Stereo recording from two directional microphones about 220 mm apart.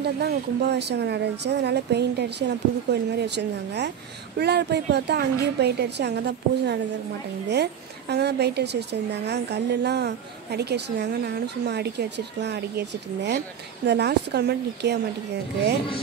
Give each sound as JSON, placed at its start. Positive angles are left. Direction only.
{"t": 0.0, "sound": "a woman's voice", "side_deg": -50}